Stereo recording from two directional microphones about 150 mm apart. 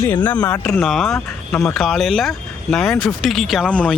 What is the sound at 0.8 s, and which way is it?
Speech, centre (ahead or behind).